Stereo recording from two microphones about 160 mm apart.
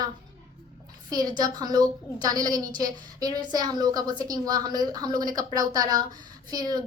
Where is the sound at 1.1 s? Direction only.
25° right (ahead or behind).